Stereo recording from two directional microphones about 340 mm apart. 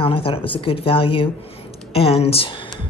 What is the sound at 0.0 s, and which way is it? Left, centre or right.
Speech, centre.